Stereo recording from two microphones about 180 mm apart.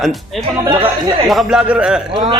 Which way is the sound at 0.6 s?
20° right (ahead or behind).